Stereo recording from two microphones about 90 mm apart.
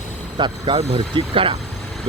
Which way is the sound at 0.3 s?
65° right (ahead or behind).